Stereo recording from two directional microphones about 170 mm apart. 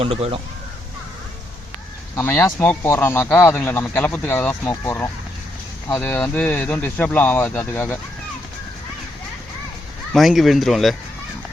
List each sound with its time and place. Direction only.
0.0 s speech: 35° right (ahead or behind)
2.1 s speech: 15° left (ahead or behind)
10.1 s speech: centre (ahead or behind)